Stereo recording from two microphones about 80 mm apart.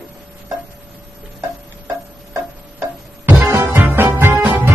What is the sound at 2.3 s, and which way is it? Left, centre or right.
Music, right.